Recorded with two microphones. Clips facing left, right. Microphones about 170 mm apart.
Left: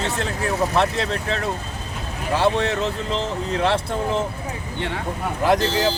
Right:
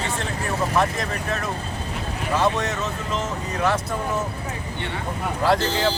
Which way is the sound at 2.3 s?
30° left (ahead or behind).